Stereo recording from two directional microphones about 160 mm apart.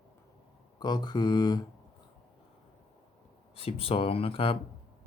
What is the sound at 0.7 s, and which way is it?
Mantra, 25° left (ahead or behind).